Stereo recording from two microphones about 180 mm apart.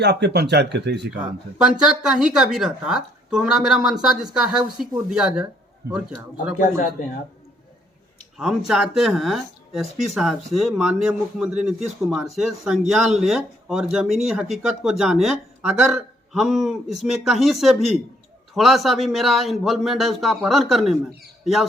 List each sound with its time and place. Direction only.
0.0 s speech: 65° right (ahead or behind)
1.2 s speech: 5° right (ahead or behind)
6.6 s a man's voice: 50° left (ahead or behind)
8.4 s speech: centre (ahead or behind)